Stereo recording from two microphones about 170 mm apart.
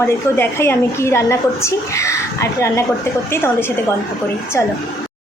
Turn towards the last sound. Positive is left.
turn(degrees=15)  # may be behind; listen again after turning